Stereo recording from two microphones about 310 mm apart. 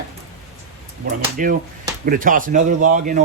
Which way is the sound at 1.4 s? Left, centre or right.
Right.